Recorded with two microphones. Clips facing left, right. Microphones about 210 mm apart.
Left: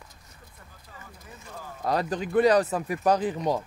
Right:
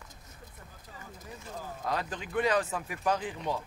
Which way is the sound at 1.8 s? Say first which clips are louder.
Left 8 dB; 40° left (ahead or behind).